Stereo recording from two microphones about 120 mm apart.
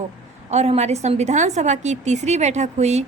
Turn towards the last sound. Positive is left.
turn(degrees=-65)  # may be behind; listen again after turning